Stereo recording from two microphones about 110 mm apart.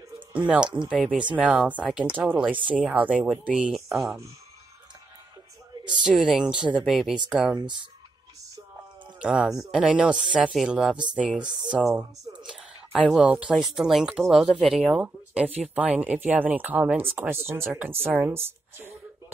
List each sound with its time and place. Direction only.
0.3 s speech: 10° right (ahead or behind)
5.9 s speech: 10° right (ahead or behind)
9.2 s speech: 10° right (ahead or behind)